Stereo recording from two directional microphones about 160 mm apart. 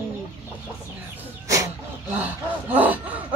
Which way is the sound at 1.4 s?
20° right (ahead or behind).